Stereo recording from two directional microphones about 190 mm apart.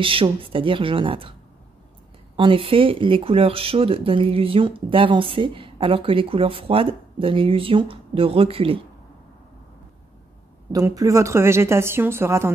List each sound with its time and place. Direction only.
0.0 s speech: 30° right (ahead or behind)
2.3 s speech: 30° right (ahead or behind)
10.7 s a woman's voice: 20° right (ahead or behind)